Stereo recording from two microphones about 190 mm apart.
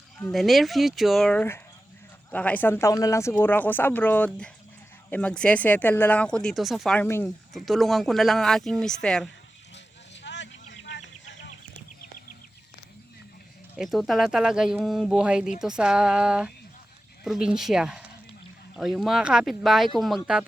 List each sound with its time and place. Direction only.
0.2 s speech: 5° left (ahead or behind)
10.2 s a sound: 70° left (ahead or behind)
13.7 s speech: centre (ahead or behind)